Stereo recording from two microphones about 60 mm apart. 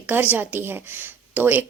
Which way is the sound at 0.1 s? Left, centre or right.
Right.